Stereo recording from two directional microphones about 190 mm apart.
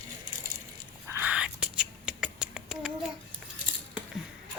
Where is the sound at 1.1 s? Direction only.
10° right (ahead or behind).